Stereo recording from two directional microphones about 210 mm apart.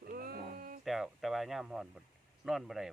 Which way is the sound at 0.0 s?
45° right (ahead or behind).